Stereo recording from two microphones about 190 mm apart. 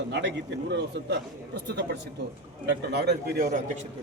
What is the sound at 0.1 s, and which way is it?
A man's voice, 70° right (ahead or behind).